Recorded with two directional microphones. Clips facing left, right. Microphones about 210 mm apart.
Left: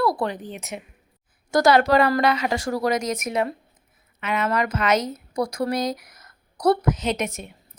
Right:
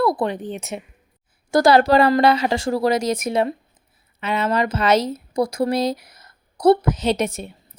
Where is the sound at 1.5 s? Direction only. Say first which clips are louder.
Right 3 dB; 30° right (ahead or behind).